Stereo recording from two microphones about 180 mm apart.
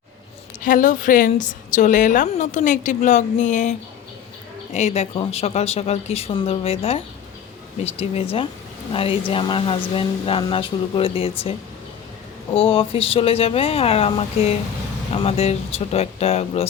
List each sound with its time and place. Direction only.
0.6 s a woman's voice: 50° left (ahead or behind); by 11.5 s 30° left (ahead or behind)
12.5 s speech: 30° left (ahead or behind)